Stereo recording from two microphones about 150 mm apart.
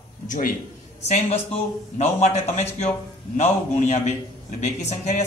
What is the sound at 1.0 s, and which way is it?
A man's voice, 45° left (ahead or behind).